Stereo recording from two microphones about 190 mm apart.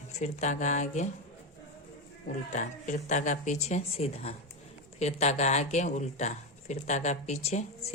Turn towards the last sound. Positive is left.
turn(degrees=35)  # may be behind; listen again after turning